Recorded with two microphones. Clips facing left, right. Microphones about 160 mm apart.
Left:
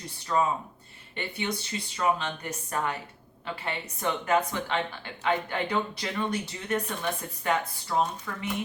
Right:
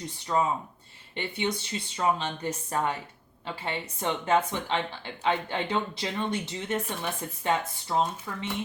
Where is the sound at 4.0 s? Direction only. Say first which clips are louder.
Even; 25° right (ahead or behind).